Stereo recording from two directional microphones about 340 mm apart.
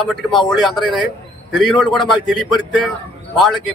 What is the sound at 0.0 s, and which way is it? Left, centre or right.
A man's voice, centre.